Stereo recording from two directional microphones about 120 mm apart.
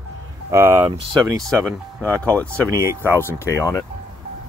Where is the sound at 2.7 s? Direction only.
25° right (ahead or behind).